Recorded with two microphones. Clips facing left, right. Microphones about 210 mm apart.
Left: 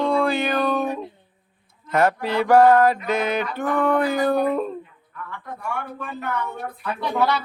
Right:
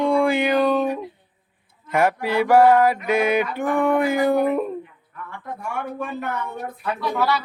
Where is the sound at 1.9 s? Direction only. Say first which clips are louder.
Even; 10° right (ahead or behind).